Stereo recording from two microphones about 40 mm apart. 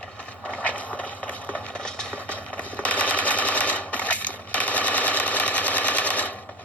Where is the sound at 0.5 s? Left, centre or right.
Left.